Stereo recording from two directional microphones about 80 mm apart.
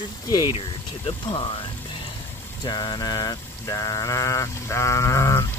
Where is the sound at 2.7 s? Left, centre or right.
Left.